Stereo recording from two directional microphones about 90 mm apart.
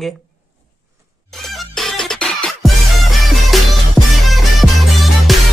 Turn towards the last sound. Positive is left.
turn(degrees=0)  # may be behind; listen again after turning